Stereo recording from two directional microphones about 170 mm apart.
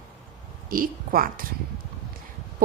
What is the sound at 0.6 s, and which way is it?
Speech, 55° right (ahead or behind).